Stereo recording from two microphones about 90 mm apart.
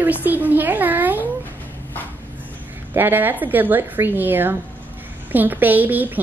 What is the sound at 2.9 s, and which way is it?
A woman's voice, 20° right (ahead or behind).